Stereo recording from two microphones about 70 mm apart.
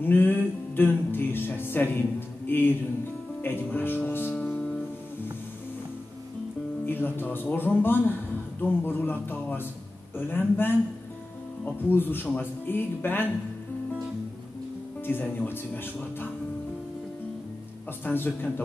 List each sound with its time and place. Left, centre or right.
0.0 s music: left
3.4 s speech: left
4.4 s music: centre
6.9 s speech: left
15.0 s speech: left
18.0 s speech: left